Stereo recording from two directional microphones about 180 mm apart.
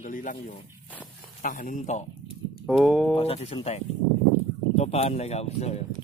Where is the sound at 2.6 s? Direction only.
Centre (ahead or behind).